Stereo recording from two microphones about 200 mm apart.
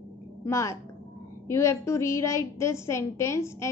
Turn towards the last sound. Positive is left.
turn(degrees=15)  # may be behind; listen again after turning